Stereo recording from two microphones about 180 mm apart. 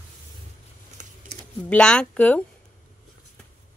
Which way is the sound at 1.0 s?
45° right (ahead or behind).